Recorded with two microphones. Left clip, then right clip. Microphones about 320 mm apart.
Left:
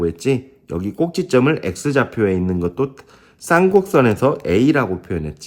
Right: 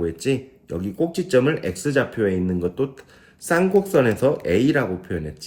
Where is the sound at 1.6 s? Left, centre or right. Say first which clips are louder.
Left 3 dB; left.